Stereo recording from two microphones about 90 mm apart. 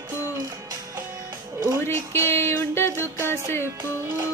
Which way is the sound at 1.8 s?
30° left (ahead or behind).